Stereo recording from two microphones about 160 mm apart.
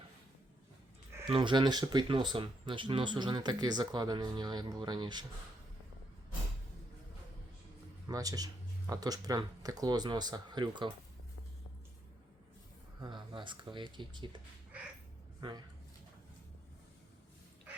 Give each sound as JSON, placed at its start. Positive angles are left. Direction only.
{"t": 1.3, "sound": "speech", "side_deg": -30}
{"t": 8.0, "sound": "speech", "side_deg": -20}
{"t": 13.0, "sound": "speech", "side_deg": -30}
{"t": 15.4, "sound": "speech", "side_deg": -30}